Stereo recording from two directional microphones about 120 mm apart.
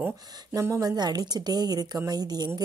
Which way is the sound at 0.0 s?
20° right (ahead or behind).